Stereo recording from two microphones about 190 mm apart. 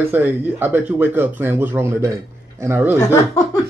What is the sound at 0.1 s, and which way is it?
Speech, 10° right (ahead or behind).